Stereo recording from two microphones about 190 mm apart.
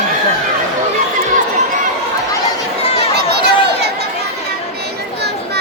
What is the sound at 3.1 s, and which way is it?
Chatter, 60° right (ahead or behind).